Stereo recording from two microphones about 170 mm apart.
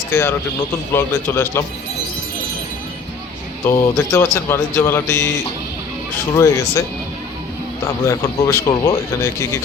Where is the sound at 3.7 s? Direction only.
15° left (ahead or behind).